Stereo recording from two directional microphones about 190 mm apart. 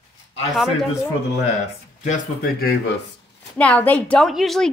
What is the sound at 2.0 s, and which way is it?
Speech, 45° left (ahead or behind).